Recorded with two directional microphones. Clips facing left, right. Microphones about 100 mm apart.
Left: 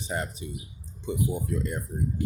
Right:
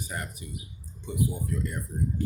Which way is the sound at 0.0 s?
25° left (ahead or behind).